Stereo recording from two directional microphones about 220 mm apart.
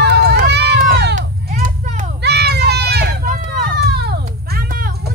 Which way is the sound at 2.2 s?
50° right (ahead or behind).